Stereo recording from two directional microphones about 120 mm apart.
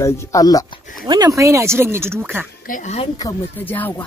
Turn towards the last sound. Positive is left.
turn(degrees=15)  # may be behind; listen again after turning